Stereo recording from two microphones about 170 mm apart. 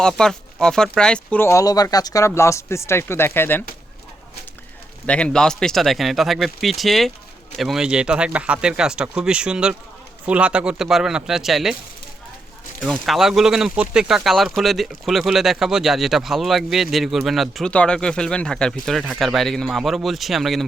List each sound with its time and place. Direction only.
0.0 s speech: 5° left (ahead or behind)
5.0 s speech: 5° left (ahead or behind)
12.8 s speech: centre (ahead or behind)